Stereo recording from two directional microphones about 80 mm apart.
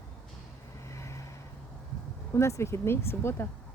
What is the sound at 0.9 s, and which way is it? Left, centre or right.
Vehicle, left.